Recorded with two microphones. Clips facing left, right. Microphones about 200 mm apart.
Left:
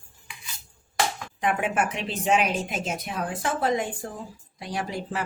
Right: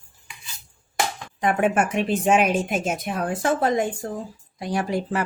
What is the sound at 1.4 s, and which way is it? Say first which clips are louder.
Speech: right 5 dB; 45° right (ahead or behind).